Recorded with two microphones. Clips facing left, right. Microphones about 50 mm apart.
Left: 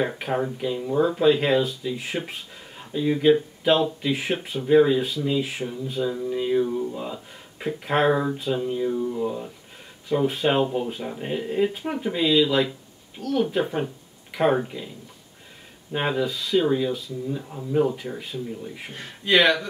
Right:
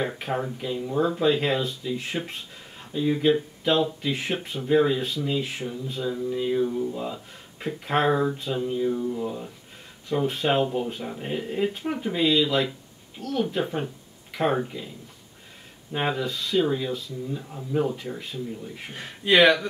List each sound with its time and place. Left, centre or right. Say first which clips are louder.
0.0 s speech: left 3 dB; centre
15.9 s speech: left 2 dB; centre